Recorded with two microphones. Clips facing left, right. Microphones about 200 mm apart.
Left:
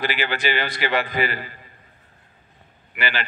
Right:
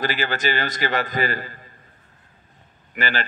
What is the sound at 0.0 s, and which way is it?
A woman's voice, 45° right (ahead or behind).